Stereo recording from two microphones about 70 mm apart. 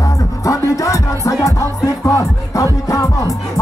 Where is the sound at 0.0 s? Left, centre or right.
Left.